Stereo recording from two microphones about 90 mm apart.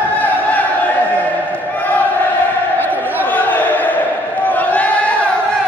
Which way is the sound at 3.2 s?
20° left (ahead or behind).